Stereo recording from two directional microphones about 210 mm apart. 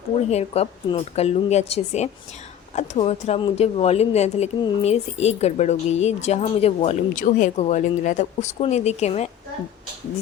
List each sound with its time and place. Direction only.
0.3 s a woman's voice: 30° left (ahead or behind)